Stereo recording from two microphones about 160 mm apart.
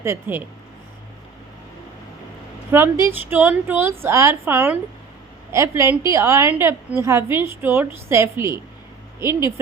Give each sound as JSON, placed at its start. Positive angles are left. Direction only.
{"t": 0.0, "sound": "a woman's voice", "side_deg": -15}
{"t": 2.7, "sound": "a woman's voice", "side_deg": -15}